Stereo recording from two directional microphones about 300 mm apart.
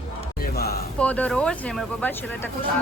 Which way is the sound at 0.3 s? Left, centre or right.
Left.